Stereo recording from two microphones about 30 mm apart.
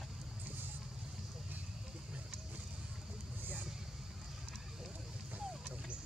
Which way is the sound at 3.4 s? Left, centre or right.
Right.